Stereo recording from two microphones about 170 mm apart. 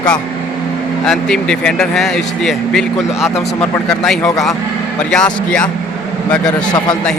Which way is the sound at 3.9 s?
5° left (ahead or behind).